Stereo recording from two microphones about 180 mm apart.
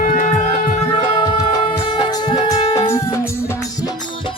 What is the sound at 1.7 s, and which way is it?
Music, 25° left (ahead or behind).